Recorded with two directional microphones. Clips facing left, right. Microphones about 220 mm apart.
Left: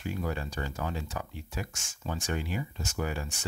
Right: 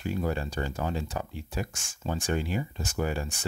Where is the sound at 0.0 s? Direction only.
30° right (ahead or behind).